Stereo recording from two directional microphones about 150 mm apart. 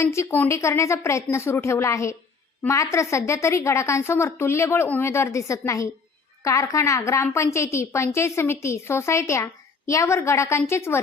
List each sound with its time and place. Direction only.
0.0 s a woman's voice: 20° left (ahead or behind)